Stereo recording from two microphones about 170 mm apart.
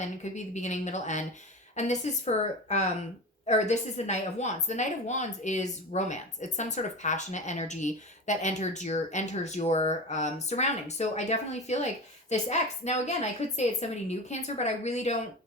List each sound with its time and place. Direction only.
0.2 s a woman's voice: 45° left (ahead or behind)